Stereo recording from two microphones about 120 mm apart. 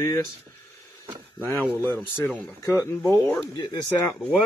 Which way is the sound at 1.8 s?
20° left (ahead or behind).